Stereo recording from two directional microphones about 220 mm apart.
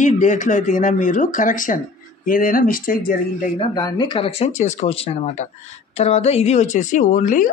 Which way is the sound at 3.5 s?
20° left (ahead or behind).